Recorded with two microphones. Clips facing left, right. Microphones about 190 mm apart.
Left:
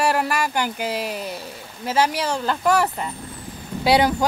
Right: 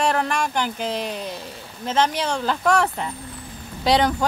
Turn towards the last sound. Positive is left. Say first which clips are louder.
# left 1 dB
turn(degrees=10)  # may be behind; listen again after turning